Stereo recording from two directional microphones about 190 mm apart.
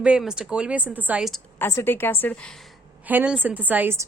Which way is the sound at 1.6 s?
10° left (ahead or behind).